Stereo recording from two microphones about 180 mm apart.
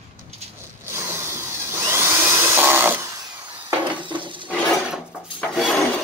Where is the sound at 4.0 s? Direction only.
25° right (ahead or behind).